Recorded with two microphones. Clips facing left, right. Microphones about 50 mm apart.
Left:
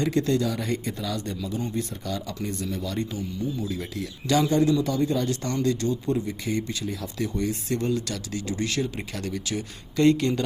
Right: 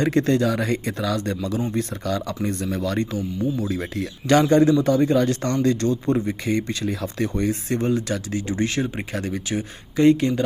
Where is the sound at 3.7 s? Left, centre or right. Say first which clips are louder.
Right 5 dB; right.